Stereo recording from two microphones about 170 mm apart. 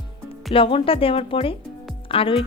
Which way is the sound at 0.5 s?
30° left (ahead or behind).